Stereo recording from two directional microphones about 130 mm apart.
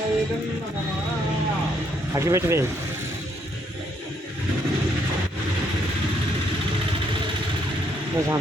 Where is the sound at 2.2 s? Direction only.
25° right (ahead or behind).